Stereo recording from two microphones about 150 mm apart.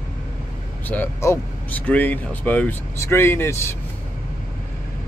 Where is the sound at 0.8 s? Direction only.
15° left (ahead or behind).